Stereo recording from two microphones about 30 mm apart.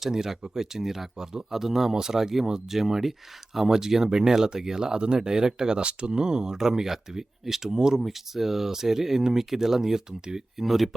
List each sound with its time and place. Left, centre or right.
0.1 s speech: centre
3.7 s speech: centre
8.0 s speech: centre
10.6 s speech: centre